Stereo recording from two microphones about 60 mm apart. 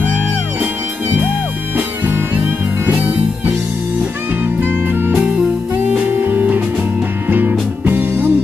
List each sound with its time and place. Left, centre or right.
2.9 s music: right
6.2 s music: right